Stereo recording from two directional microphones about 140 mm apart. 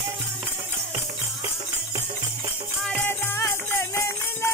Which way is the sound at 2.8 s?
10° left (ahead or behind).